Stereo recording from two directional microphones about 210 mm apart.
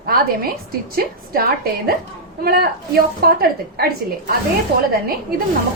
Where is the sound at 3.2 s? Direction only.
45° right (ahead or behind).